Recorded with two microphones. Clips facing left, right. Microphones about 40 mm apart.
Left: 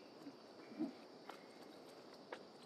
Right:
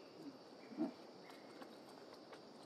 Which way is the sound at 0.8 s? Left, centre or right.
Centre.